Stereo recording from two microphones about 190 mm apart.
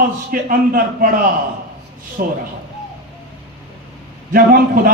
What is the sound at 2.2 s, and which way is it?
Speech, 50° right (ahead or behind).